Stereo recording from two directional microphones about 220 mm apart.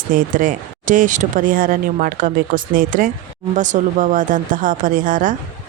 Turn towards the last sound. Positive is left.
turn(degrees=-35)  # may be behind; listen again after turning